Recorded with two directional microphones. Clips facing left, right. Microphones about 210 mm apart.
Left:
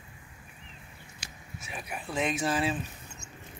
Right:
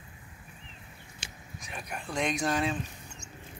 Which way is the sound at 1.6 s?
5° left (ahead or behind).